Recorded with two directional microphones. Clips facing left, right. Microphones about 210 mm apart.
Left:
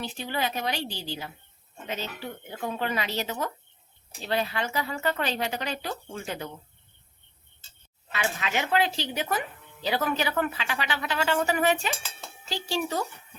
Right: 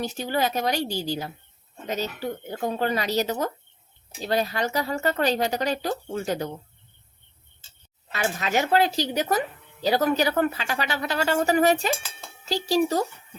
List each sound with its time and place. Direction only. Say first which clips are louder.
0.0 s speech: right 5 dB; 40° right (ahead or behind)
8.1 s speech: right 4 dB; 40° right (ahead or behind)